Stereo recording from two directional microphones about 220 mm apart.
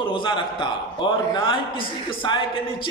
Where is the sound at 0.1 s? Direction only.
20° left (ahead or behind).